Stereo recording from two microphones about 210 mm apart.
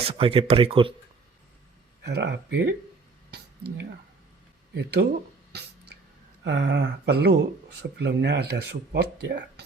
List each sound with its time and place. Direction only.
0.0 s speech: 25° right (ahead or behind)
2.0 s speech: 55° right (ahead or behind)
4.7 s speech: 55° right (ahead or behind)
6.4 s speech: 55° right (ahead or behind)